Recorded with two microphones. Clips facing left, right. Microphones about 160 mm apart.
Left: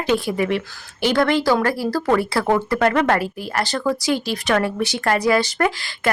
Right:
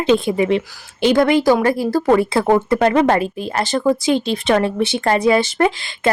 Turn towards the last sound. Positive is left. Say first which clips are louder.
# right 4 dB
turn(degrees=-20)  # may be behind; listen again after turning